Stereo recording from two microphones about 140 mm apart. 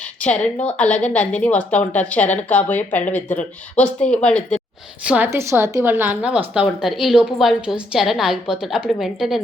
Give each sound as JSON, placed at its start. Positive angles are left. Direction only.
{"t": 0.2, "sound": "a woman's voice", "side_deg": 10}
{"t": 5.0, "sound": "a woman's voice", "side_deg": -10}